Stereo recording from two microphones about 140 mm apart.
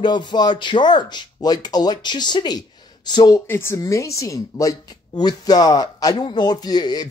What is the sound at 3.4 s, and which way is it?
Speech, 20° left (ahead or behind).